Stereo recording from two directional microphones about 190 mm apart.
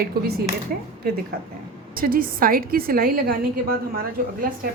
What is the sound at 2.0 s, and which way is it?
A woman's voice, 50° right (ahead or behind).